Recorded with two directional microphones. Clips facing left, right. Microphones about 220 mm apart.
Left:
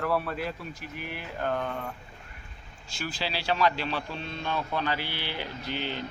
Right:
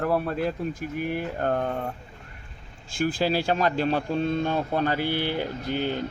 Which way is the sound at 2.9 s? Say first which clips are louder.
Right 10 dB; 50° right (ahead or behind).